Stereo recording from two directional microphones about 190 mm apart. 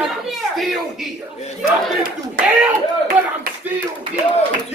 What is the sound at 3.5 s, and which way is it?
Clapping, 50° right (ahead or behind).